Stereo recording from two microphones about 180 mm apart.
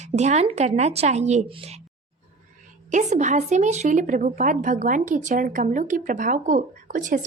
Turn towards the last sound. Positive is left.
turn(degrees=-45)  # may be behind; listen again after turning